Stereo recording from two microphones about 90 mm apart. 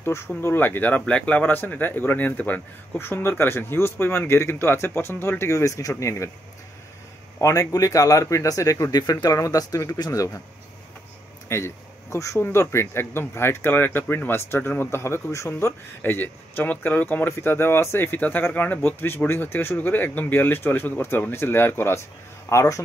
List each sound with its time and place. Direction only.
0.4 s speech: 25° left (ahead or behind)
7.3 s speech: 35° left (ahead or behind)
11.4 s speech: 30° left (ahead or behind)
16.0 s speech: 20° left (ahead or behind)